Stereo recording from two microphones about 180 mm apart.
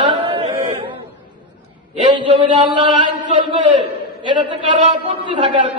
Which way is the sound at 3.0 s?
25° right (ahead or behind).